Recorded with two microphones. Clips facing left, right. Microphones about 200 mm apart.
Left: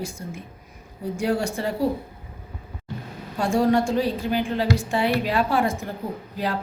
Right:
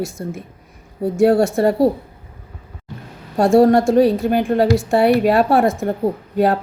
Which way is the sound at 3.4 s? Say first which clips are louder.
Right 8 dB; 60° right (ahead or behind).